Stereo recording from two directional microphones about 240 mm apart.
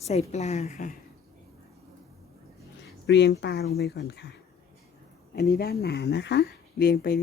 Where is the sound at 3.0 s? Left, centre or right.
Left.